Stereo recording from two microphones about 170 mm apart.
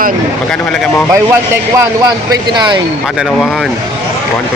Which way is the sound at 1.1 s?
15° right (ahead or behind).